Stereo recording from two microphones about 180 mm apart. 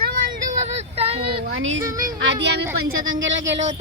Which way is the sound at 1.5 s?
90° right.